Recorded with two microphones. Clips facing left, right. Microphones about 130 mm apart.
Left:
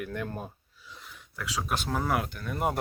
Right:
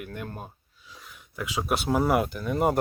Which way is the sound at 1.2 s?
15° right (ahead or behind).